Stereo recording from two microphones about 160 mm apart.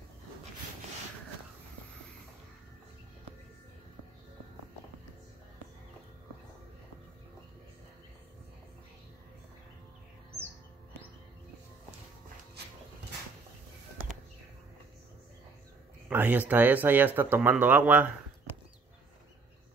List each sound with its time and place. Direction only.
12.6 s dog: 90° right
16.1 s speech: 10° right (ahead or behind)